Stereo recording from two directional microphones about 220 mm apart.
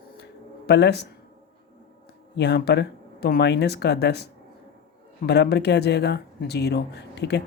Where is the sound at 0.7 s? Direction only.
50° left (ahead or behind).